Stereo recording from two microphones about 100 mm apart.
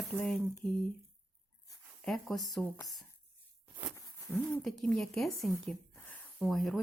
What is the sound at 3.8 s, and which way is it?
Speech, 5° left (ahead or behind).